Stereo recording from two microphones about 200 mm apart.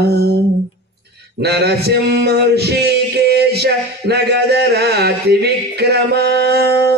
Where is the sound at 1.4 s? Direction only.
55° right (ahead or behind).